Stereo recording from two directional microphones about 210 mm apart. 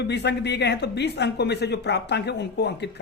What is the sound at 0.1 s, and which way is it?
Speech, 55° left (ahead or behind).